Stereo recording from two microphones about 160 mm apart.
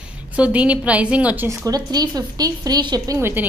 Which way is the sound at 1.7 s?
25° right (ahead or behind).